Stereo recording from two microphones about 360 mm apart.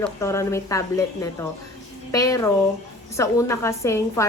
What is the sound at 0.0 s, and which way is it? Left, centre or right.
A woman's voice, centre.